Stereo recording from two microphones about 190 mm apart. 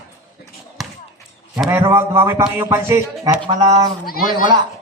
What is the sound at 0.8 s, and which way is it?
Basketball bounce, centre (ahead or behind).